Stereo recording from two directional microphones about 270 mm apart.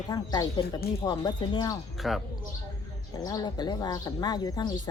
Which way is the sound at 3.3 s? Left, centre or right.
Centre.